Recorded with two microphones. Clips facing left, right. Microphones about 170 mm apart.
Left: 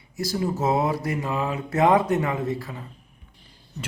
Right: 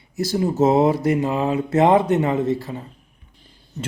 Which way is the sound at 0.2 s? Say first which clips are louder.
Right 7 dB; 25° right (ahead or behind).